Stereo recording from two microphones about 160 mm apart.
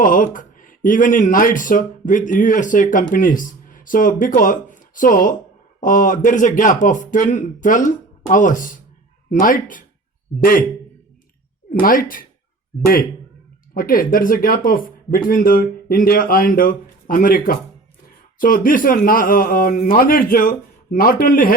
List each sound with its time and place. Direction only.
0.0 s speech: 55° left (ahead or behind)
11.7 s speech: 60° left (ahead or behind)
13.7 s speech: 60° left (ahead or behind)